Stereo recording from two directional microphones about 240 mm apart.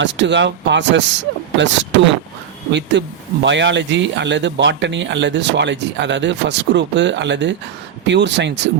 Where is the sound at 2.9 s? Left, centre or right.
Right.